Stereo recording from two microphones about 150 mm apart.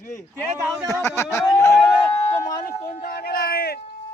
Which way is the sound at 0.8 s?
20° left (ahead or behind).